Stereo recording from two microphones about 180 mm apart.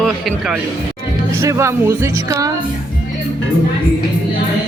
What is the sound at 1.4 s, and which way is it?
Speech, 15° right (ahead or behind).